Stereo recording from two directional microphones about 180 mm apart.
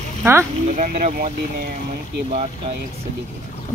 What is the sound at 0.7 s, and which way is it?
Speech, 40° right (ahead or behind).